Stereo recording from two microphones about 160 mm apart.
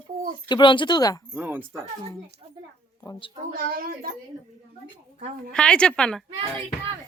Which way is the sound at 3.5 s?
65° right (ahead or behind).